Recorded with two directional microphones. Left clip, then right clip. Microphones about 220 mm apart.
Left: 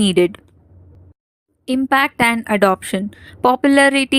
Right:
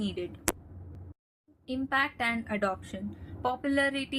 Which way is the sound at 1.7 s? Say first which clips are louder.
Left 13 dB; 50° left (ahead or behind).